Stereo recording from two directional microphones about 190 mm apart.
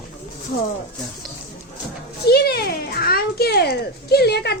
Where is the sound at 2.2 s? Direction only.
55° left (ahead or behind).